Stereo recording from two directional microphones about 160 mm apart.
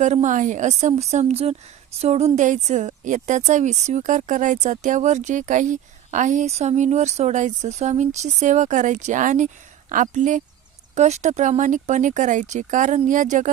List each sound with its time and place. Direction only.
0.0 s a woman's voice: 50° right (ahead or behind)